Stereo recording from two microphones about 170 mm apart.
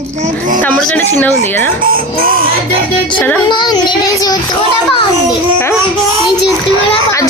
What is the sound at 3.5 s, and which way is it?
Child singing, 25° left (ahead or behind).